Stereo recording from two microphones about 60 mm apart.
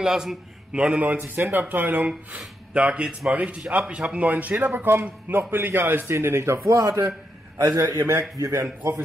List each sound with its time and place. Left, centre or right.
0.0 s a man's voice: centre
1.0 s speech: right
2.3 s speech: centre
4.7 s speech: right
6.1 s speech: right
7.5 s a man's voice: right
8.1 s a man's voice: right